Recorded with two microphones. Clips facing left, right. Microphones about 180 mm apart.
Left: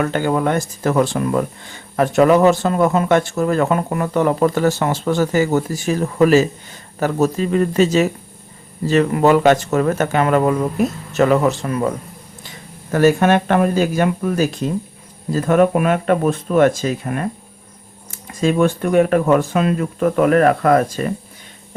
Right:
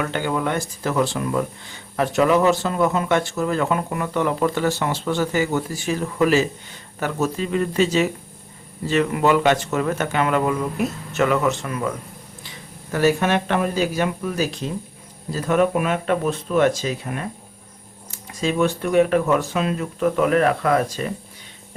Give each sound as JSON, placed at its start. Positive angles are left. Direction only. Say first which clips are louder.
{"t": 0.0, "sound": "speech", "louder": "left 5 dB", "side_deg": 45}
{"t": 12.4, "sound": "speech", "louder": "left 2 dB", "side_deg": 50}